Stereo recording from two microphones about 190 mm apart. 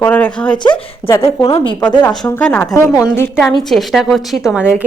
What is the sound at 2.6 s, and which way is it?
Speech, 15° left (ahead or behind).